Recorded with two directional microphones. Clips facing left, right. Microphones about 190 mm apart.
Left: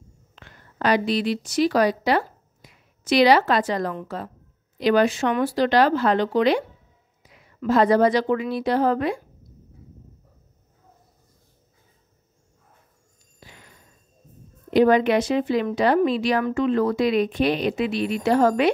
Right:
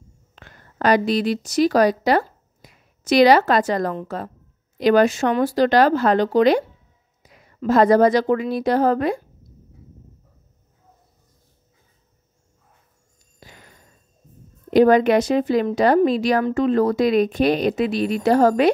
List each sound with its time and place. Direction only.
0.4 s a woman's voice: 45° right (ahead or behind)
13.4 s a sound: 45° right (ahead or behind)
14.7 s a woman's voice: 45° right (ahead or behind)